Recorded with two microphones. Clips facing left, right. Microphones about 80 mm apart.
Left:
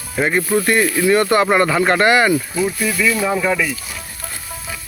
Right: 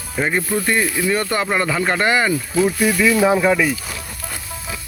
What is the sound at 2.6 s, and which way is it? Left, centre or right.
Speech, centre.